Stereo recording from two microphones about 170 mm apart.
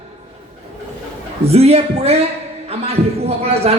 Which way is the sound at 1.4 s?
35° right (ahead or behind).